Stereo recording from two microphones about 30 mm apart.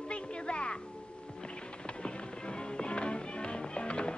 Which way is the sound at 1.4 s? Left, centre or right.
Left.